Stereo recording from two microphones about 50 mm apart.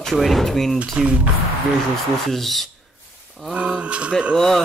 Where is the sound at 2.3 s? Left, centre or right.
Centre.